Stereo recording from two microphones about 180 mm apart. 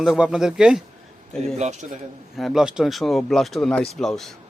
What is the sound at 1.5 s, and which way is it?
Speech, 40° right (ahead or behind).